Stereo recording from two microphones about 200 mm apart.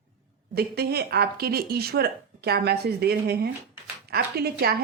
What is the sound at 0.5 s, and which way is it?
A woman's voice, 50° right (ahead or behind).